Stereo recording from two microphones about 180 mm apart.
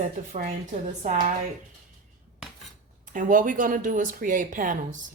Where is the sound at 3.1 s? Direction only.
50° right (ahead or behind).